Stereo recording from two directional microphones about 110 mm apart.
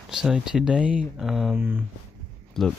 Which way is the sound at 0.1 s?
5° right (ahead or behind).